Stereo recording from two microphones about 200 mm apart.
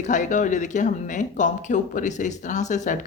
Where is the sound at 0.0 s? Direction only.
40° left (ahead or behind).